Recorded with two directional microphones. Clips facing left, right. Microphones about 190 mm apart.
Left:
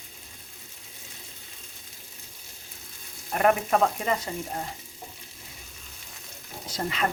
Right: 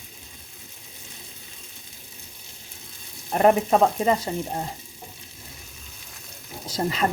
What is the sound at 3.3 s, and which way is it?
Speech, 30° right (ahead or behind).